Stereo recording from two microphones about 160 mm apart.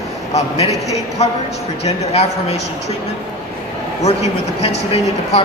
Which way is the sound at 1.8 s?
40° left (ahead or behind).